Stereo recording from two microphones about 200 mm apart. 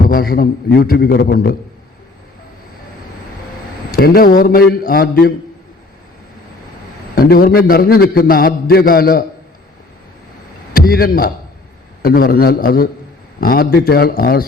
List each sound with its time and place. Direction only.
0.1 s a man's voice: 45° left (ahead or behind)
3.9 s a man's voice: 50° left (ahead or behind)
7.2 s a man's voice: 50° left (ahead or behind)
10.8 s a man's voice: 50° left (ahead or behind)